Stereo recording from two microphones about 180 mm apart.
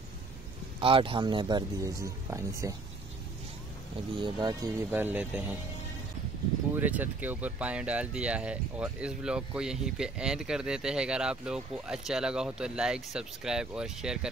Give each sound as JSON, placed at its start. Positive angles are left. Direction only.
{"t": 0.7, "sound": "speech", "side_deg": -30}
{"t": 4.2, "sound": "speech", "side_deg": -20}
{"t": 6.7, "sound": "speech", "side_deg": -10}